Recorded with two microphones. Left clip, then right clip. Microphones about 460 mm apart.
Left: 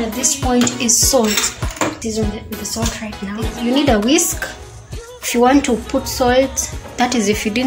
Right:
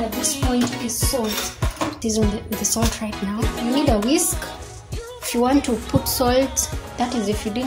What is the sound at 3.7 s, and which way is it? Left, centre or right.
Speech, right.